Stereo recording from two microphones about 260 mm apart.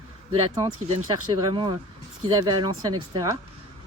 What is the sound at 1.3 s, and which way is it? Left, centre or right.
Speech, centre.